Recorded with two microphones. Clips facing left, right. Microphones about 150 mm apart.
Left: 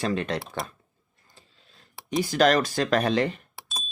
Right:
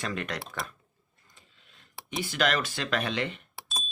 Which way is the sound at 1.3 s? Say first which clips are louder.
Left 4 dB; 35° left (ahead or behind).